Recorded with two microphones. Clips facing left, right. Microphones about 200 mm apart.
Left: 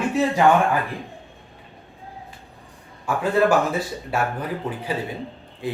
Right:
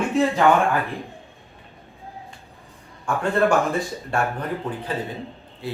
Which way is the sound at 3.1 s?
5° left (ahead or behind).